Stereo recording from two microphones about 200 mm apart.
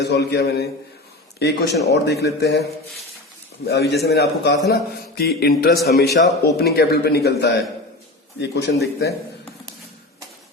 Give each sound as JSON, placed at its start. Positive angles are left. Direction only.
{"t": 0.0, "sound": "a man's voice", "side_deg": 55}
{"t": 3.7, "sound": "a man's voice", "side_deg": 55}